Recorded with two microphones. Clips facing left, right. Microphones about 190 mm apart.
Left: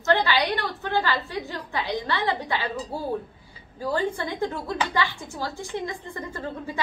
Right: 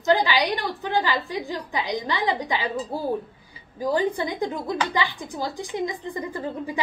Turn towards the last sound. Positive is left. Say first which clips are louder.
# right 3 dB
turn(degrees=-15)  # may be behind; listen again after turning